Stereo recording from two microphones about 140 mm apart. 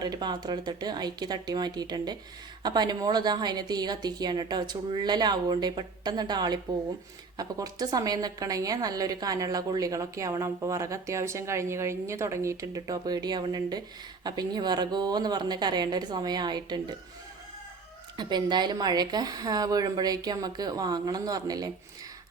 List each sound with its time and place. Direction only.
0.0 s a woman's voice: 30° right (ahead or behind)
18.2 s a woman's voice: 30° right (ahead or behind)